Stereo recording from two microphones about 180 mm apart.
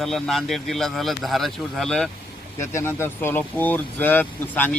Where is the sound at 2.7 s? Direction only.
15° left (ahead or behind).